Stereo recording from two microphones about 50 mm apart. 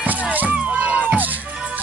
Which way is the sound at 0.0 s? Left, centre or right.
Right.